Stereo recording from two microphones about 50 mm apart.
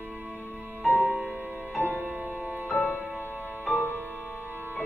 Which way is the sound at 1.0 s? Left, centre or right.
Right.